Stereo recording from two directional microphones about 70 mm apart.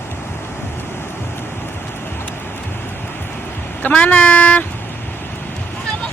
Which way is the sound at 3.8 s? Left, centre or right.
Left.